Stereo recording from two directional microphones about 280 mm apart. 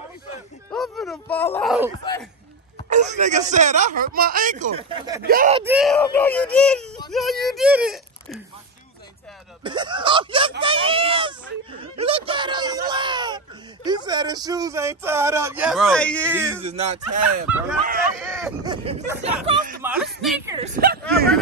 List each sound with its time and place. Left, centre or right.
0.7 s speech: centre
2.9 s speech: right
5.2 s speech: right
5.6 s speech: centre
9.6 s speech: centre
16.6 s speech: right
17.5 s speech: centre
18.2 s a sound: centre
18.6 s speech: centre
19.8 s a sound: centre
20.2 s speech: centre
20.4 s speech: centre
20.7 s speech: right